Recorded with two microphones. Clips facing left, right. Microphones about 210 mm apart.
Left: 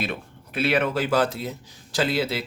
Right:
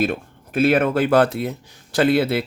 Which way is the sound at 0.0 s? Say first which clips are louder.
Right 8 dB; 45° right (ahead or behind).